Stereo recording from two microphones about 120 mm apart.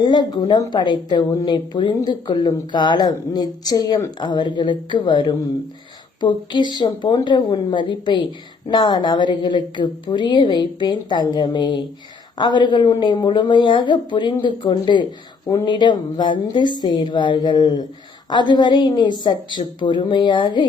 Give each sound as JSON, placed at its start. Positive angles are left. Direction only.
{"t": 0.0, "sound": "a woman's voice", "side_deg": 40}